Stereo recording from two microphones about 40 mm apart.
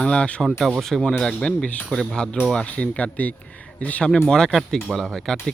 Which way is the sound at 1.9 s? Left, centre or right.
Centre.